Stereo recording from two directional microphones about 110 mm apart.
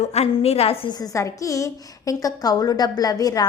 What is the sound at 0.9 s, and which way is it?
A woman's voice, 30° left (ahead or behind).